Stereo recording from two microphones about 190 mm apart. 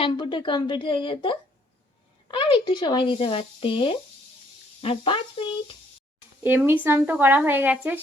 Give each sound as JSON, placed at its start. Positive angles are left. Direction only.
{"t": 0.0, "sound": "speech", "side_deg": 25}
{"t": 6.4, "sound": "speech", "side_deg": -10}